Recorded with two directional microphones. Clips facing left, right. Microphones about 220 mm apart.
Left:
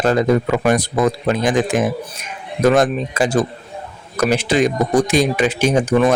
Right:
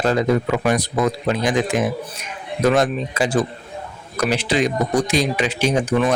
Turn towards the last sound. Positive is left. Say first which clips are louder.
# left 4 dB
turn(degrees=45)  # may be behind; listen again after turning